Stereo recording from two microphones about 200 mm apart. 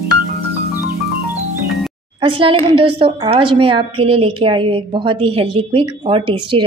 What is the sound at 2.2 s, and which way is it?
A woman's voice, 25° right (ahead or behind).